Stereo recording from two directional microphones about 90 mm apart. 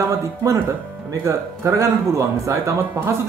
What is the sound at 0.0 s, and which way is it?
Speech, 35° right (ahead or behind).